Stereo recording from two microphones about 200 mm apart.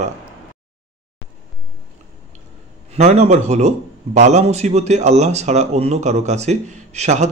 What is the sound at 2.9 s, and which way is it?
A man's voice, 35° right (ahead or behind).